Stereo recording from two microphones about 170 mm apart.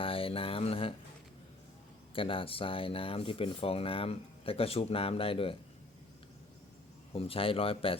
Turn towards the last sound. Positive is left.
turn(degrees=35)  # may be behind; listen again after turning